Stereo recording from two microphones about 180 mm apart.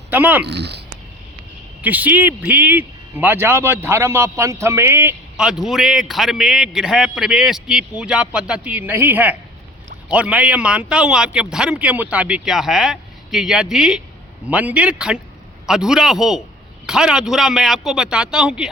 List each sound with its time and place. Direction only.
0.1 s speech: 10° right (ahead or behind)
0.4 s speech: 70° right (ahead or behind)
1.8 s a man's voice: 10° right (ahead or behind)